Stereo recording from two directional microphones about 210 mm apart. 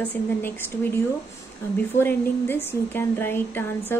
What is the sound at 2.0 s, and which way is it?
A woman's voice, 10° left (ahead or behind).